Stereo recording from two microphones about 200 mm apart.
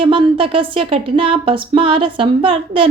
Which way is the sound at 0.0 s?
25° right (ahead or behind).